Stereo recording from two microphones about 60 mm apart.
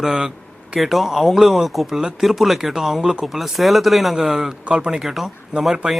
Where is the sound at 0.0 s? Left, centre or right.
Centre.